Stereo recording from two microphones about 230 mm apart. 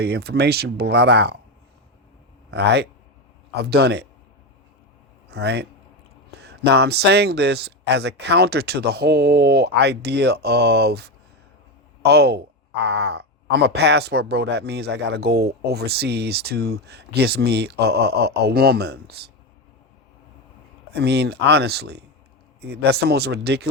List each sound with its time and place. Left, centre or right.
0.0 s speech: right
2.5 s speech: right
5.3 s speech: right
20.9 s speech: right